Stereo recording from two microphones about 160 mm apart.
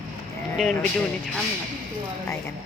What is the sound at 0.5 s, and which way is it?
Speech, 5° left (ahead or behind).